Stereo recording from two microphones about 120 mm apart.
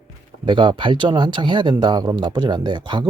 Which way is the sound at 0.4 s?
40° right (ahead or behind).